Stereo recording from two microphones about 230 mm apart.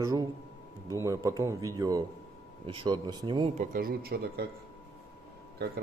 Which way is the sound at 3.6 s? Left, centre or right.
Right.